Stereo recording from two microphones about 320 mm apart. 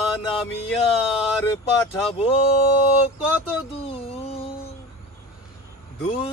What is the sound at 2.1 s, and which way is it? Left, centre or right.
Speech, centre.